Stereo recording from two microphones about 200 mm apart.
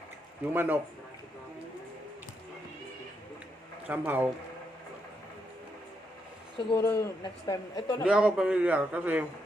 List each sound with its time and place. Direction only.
0.5 s a man's voice: 10° right (ahead or behind)
3.8 s a man's voice: 10° right (ahead or behind)
6.7 s a woman's voice: 20° left (ahead or behind)
8.0 s a man's voice: 5° right (ahead or behind)